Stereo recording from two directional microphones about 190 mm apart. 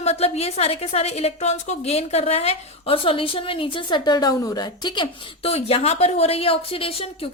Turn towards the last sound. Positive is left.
turn(degrees=30)  # may be behind; listen again after turning